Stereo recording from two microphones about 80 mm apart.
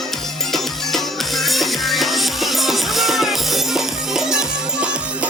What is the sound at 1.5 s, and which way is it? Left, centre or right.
Music, centre.